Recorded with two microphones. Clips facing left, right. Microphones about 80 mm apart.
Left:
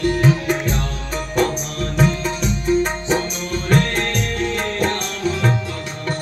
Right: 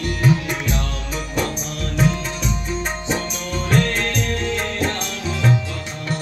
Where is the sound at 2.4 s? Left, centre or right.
Left.